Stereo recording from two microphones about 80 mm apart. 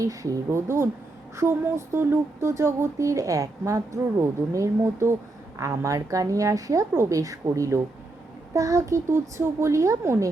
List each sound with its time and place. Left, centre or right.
0.0 s a woman's voice: right